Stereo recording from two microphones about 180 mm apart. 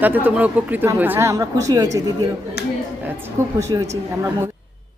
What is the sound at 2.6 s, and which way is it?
Speech, 60° left (ahead or behind).